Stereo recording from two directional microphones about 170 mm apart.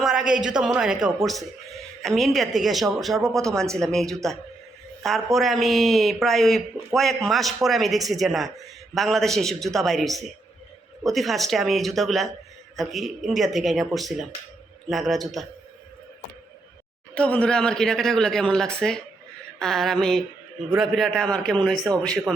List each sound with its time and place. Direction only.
0.0 s speech: centre (ahead or behind)
3.2 s speech: 20° right (ahead or behind)
3.4 s speech: 5° left (ahead or behind)
17.2 s speech: 5° left (ahead or behind)